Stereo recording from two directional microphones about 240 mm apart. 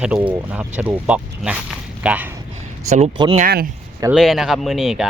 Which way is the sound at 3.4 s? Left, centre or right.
Right.